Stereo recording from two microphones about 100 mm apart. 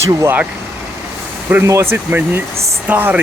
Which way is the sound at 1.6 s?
25° right (ahead or behind).